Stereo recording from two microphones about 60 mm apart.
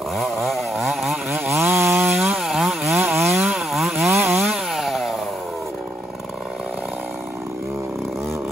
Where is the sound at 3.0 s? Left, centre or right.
Right.